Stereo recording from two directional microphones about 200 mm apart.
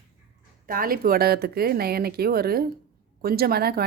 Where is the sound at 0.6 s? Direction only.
45° right (ahead or behind).